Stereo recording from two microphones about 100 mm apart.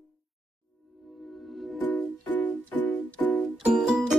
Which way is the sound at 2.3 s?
15° left (ahead or behind).